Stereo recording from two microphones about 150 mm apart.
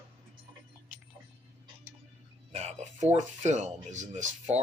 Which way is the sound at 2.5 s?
50° right (ahead or behind).